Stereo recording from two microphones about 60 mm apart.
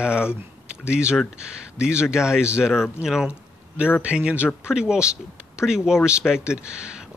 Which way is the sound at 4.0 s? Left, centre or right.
Centre.